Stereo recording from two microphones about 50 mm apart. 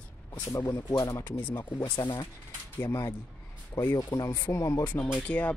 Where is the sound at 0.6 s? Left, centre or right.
Left.